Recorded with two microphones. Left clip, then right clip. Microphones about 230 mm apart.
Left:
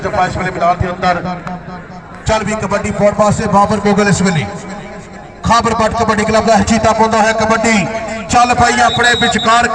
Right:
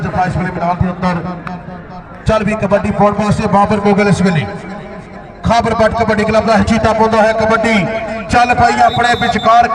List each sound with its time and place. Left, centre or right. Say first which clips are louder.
0.0 s a man's voice: left 2 dB; left
2.2 s a man's voice: right 1 dB; right
8.0 s a sound: left 2 dB; right
8.5 s speech: right 1 dB; right